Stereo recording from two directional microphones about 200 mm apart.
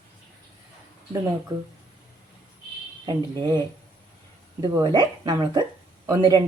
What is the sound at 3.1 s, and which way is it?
Speech, 20° right (ahead or behind).